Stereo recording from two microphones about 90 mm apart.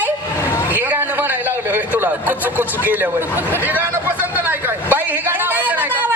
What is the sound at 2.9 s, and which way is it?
Speech, 20° right (ahead or behind).